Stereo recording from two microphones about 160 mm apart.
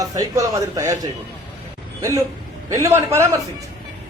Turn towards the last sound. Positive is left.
turn(degrees=-15)  # may be behind; listen again after turning